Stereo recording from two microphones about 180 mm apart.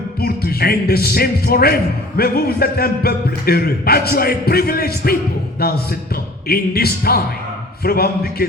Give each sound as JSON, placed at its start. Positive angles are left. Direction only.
{"t": 0.2, "sound": "a man's voice", "side_deg": 60}